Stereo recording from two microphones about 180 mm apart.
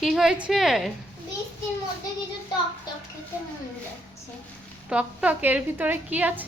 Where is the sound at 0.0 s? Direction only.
Centre (ahead or behind).